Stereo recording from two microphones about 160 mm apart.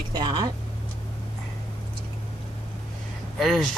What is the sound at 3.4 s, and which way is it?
Speech, centre (ahead or behind).